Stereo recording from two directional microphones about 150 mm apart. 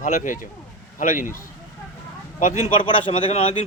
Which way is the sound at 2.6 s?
35° left (ahead or behind).